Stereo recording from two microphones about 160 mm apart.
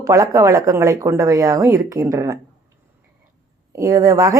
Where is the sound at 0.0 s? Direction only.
20° right (ahead or behind).